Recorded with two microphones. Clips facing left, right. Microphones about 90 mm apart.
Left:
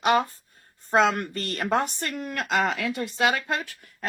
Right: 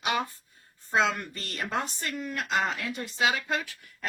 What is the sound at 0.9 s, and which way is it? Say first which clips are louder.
A woman's voice: left 5 dB; 55° left (ahead or behind).